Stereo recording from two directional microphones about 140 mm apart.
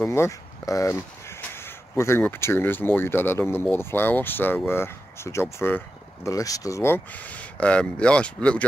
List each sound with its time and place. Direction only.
0.0 s speech: 20° left (ahead or behind)